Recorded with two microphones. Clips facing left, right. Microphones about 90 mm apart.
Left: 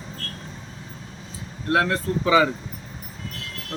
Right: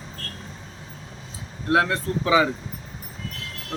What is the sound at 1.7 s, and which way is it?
Speech, 10° right (ahead or behind).